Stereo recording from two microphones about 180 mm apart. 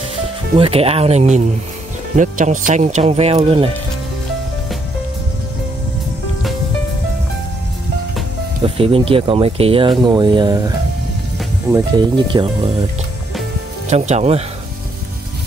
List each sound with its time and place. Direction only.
0.6 s speech: 35° right (ahead or behind)
8.6 s speech: 30° right (ahead or behind)
11.7 s speech: 25° right (ahead or behind)
13.8 s speech: 35° right (ahead or behind)